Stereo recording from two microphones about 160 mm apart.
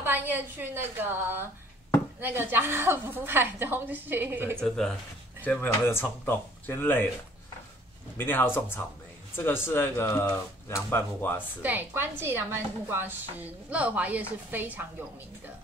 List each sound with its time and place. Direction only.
0.0 s speech: 10° right (ahead or behind)
4.6 s speech: 5° left (ahead or behind)
8.2 s speech: 10° left (ahead or behind)
11.6 s speech: 10° right (ahead or behind)